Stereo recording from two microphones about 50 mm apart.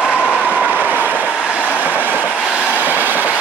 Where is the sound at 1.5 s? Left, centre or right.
Left.